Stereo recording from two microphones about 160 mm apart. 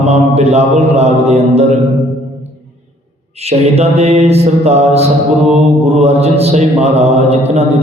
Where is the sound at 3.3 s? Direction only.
40° right (ahead or behind).